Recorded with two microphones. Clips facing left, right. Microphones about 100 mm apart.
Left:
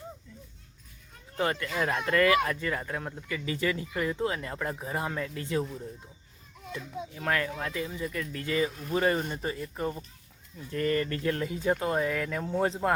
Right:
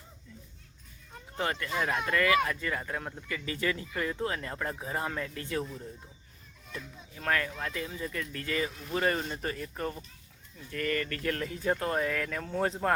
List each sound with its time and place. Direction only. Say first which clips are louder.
1.4 s speech: left 2 dB; 25° left (ahead or behind)
7.2 s speech: left 1 dB; 15° left (ahead or behind)